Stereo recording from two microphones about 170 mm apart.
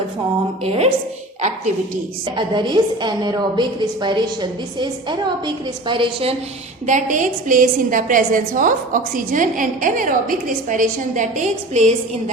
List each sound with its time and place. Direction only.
0.6 s a woman's voice: 35° right (ahead or behind)
2.2 s a woman's voice: 30° right (ahead or behind)
6.8 s a woman's voice: 50° right (ahead or behind)